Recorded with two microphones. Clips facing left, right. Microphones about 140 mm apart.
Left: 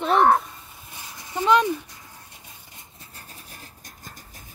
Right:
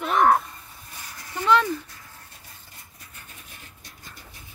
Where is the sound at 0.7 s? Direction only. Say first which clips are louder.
Left 1 dB; 15° left (ahead or behind).